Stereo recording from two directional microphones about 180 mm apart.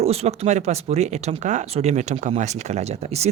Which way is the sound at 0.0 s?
35° right (ahead or behind).